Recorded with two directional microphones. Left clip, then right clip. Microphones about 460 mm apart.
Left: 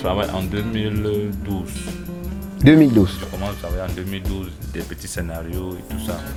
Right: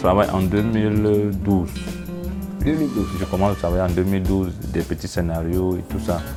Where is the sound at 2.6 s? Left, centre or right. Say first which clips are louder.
Left 10 dB; left.